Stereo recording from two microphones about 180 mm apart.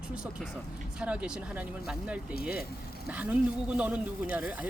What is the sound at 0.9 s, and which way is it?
Speech, 5° right (ahead or behind).